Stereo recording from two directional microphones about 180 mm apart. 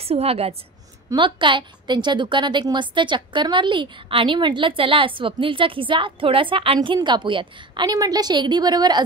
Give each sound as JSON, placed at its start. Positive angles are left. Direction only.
{"t": 0.0, "sound": "a woman's voice", "side_deg": -35}